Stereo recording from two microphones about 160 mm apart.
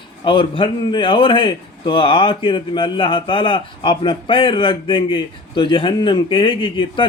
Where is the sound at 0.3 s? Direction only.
30° left (ahead or behind).